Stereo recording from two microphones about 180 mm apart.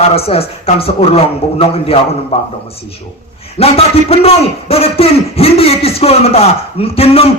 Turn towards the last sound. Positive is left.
turn(degrees=35)  # may be behind; listen again after turning